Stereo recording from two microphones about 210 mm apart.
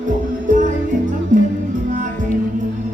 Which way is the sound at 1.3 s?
35° right (ahead or behind).